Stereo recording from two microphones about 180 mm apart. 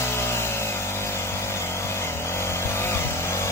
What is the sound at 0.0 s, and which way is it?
Vehicle, 15° left (ahead or behind).